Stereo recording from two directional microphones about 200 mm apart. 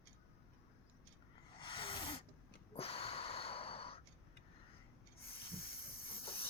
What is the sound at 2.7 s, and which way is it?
Gasp, 30° left (ahead or behind).